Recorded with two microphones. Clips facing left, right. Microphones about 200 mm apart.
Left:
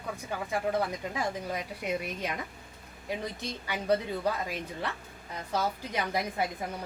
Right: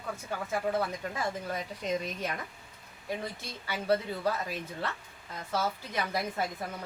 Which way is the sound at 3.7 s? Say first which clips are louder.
Even; 15° left (ahead or behind).